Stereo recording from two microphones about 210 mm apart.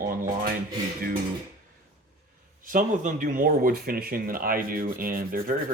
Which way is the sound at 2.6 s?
40° right (ahead or behind).